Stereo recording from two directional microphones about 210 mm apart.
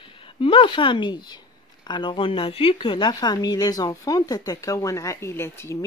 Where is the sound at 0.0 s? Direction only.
25° left (ahead or behind).